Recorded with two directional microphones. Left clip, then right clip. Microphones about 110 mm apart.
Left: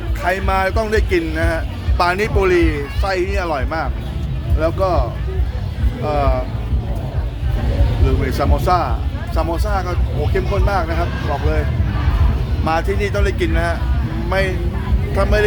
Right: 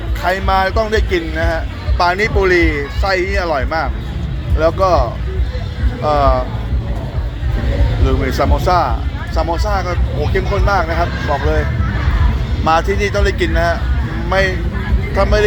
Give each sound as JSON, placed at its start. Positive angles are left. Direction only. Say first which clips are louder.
{"t": 0.2, "sound": "a man's voice", "louder": "right 3 dB", "side_deg": 20}
{"t": 2.5, "sound": "speech", "louder": "right 3 dB", "side_deg": 15}
{"t": 4.6, "sound": "speech", "louder": "right 5 dB", "side_deg": 5}
{"t": 8.2, "sound": "speech", "louder": "right 4 dB", "side_deg": 15}
{"t": 12.6, "sound": "speech", "louder": "right 5 dB", "side_deg": 0}